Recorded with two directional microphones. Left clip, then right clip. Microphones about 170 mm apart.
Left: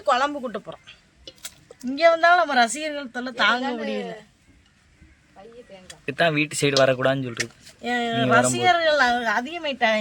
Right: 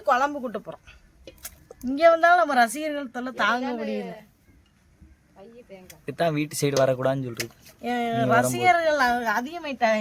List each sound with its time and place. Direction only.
0.1 s speech: centre (ahead or behind)
1.9 s a woman's voice: 10° right (ahead or behind)
3.6 s a woman's voice: 20° left (ahead or behind)
3.8 s speech: centre (ahead or behind)
5.9 s a woman's voice: centre (ahead or behind)